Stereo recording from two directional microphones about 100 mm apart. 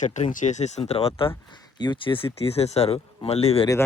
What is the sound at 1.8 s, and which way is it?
Speech, 55° left (ahead or behind).